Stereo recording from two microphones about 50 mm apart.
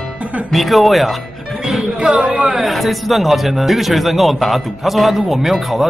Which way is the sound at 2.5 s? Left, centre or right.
Centre.